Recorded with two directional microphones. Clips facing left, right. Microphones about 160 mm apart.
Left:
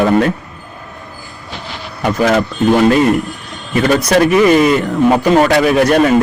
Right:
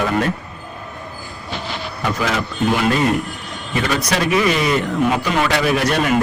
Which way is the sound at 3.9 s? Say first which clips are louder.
Left 8 dB; 50° left (ahead or behind).